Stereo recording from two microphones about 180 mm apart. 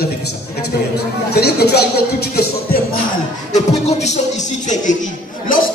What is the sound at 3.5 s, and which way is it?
Music, 40° left (ahead or behind).